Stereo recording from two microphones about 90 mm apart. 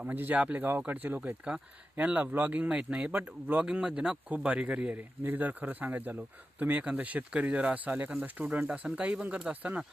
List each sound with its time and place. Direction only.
0.0 s speech: 20° right (ahead or behind)